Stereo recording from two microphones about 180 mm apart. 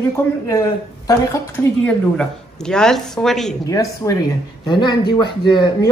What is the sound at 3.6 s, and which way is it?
Speech, 20° left (ahead or behind).